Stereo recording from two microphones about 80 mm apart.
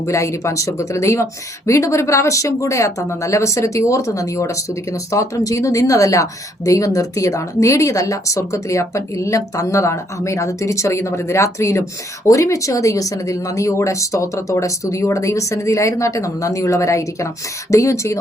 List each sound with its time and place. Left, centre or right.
0.1 s speech: left